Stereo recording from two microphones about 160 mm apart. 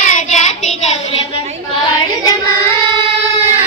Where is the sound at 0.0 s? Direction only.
50° left (ahead or behind).